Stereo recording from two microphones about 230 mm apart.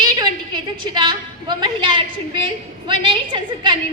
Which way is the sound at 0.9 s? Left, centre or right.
Centre.